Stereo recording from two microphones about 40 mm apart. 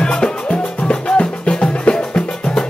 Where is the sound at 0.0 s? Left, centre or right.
Left.